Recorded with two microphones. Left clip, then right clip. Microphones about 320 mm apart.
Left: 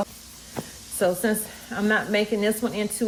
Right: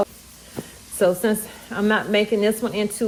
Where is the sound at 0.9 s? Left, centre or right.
Centre.